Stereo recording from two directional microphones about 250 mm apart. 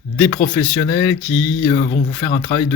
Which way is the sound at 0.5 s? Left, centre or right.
Centre.